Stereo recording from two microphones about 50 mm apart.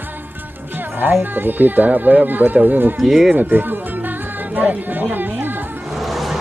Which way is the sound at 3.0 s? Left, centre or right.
Centre.